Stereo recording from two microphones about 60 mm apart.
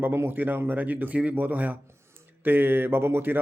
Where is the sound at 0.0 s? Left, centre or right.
Right.